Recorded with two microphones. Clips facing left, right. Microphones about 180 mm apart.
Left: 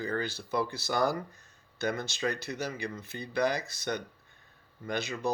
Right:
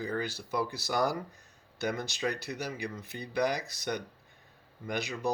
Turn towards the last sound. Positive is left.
turn(degrees=-15)  # may be behind; listen again after turning